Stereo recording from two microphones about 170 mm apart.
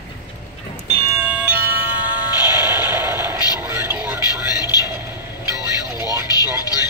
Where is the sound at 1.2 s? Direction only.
15° right (ahead or behind).